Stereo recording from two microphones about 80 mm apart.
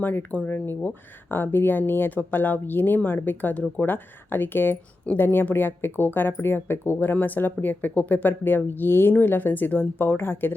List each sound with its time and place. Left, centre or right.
0.0 s speech: left